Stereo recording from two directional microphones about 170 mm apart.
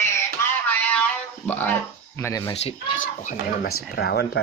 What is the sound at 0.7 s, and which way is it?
Music, 10° left (ahead or behind).